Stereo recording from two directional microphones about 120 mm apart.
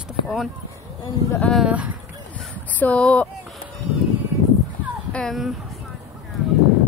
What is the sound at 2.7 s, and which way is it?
Speech, 10° left (ahead or behind).